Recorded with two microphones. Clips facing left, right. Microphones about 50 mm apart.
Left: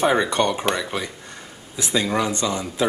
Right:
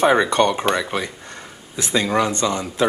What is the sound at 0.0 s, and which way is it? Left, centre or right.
Speech, centre.